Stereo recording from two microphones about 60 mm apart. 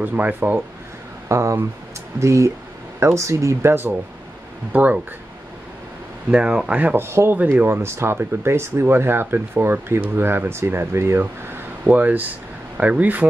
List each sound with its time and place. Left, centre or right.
0.0 s speech: right
1.3 s speech: right
3.6 s speech: right
4.7 s speech: right
6.3 s speech: centre
7.0 s speech: right
7.3 s speech: right
9.9 s speech: right
10.2 s speech: right
11.8 s speech: right